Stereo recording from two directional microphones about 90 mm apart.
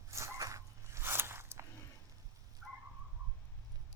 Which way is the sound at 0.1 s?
35° right (ahead or behind).